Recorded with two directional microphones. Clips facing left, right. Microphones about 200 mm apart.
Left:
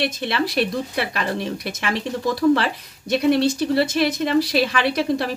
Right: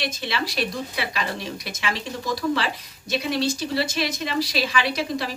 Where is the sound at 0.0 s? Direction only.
55° left (ahead or behind).